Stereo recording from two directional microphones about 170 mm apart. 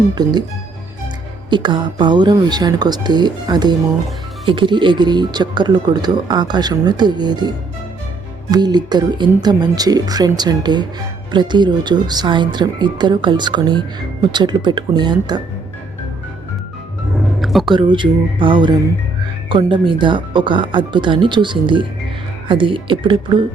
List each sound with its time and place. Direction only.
0.1 s speech: 25° right (ahead or behind)
1.5 s speech: 25° right (ahead or behind)
17.4 s a sound: centre (ahead or behind)
17.7 s speech: 30° right (ahead or behind)